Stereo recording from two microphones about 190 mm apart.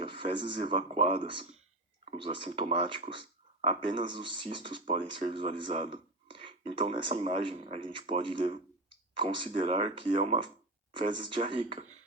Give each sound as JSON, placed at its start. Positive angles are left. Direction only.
{"t": 0.0, "sound": "speech", "side_deg": -25}